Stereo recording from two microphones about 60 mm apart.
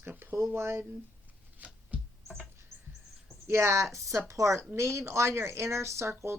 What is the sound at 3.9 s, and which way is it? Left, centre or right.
Speech, right.